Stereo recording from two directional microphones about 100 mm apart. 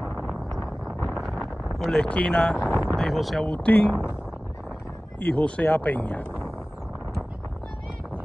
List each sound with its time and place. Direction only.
0.6 s wind noise: centre (ahead or behind)
1.8 s speech: 5° left (ahead or behind)
3.5 s speech: 15° left (ahead or behind)
5.2 s speech: 15° left (ahead or behind)